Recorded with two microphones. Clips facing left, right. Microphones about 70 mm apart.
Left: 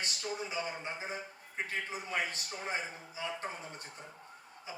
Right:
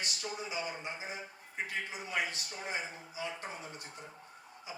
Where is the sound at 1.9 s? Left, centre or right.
Left.